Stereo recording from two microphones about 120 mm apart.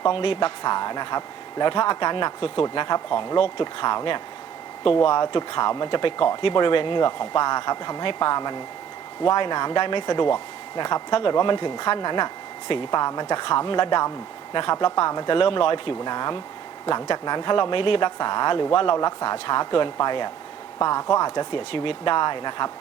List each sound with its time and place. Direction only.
0.0 s speech: 45° left (ahead or behind)
15.4 s speech: 45° left (ahead or behind)